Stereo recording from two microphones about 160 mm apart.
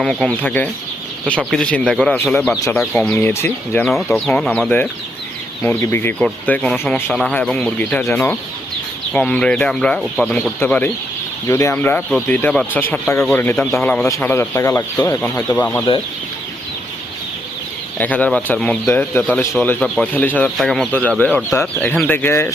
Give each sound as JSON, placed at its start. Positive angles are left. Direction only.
{"t": 0.0, "sound": "speech", "side_deg": 5}
{"t": 3.8, "sound": "speech", "side_deg": 0}
{"t": 5.6, "sound": "speech", "side_deg": 15}
{"t": 17.9, "sound": "speech", "side_deg": 10}